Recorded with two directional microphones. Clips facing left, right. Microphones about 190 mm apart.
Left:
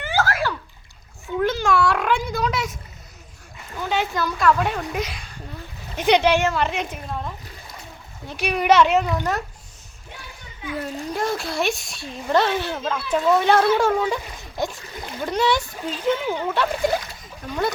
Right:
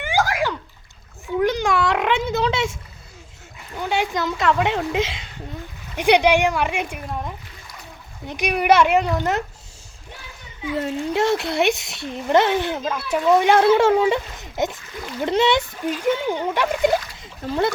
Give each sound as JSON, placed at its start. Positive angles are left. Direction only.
{"t": 0.0, "sound": "bathtub", "side_deg": -15}
{"t": 1.4, "sound": "a sound", "side_deg": -15}
{"t": 3.8, "sound": "speech", "side_deg": -15}
{"t": 6.0, "sound": "speech", "side_deg": -10}
{"t": 8.3, "sound": "speech", "side_deg": -15}
{"t": 11.3, "sound": "speech", "side_deg": -20}
{"t": 12.8, "sound": "speech", "side_deg": -5}